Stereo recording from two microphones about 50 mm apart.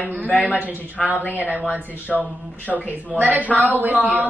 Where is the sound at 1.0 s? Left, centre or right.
Centre.